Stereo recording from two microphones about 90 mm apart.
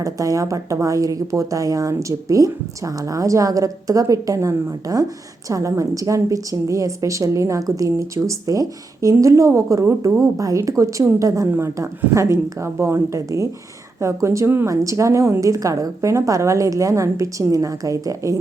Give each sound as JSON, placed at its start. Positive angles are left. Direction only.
{"t": 0.0, "sound": "speech", "side_deg": -40}